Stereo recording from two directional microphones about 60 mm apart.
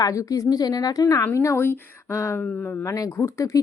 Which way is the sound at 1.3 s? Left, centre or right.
Left.